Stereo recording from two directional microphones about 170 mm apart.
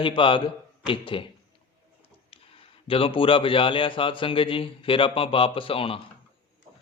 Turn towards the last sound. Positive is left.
turn(degrees=35)  # may be behind; listen again after turning